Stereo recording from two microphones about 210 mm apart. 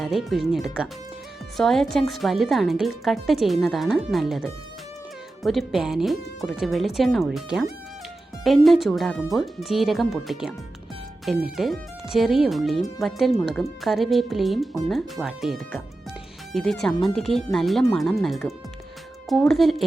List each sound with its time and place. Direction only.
0.0 s a woman's voice: centre (ahead or behind)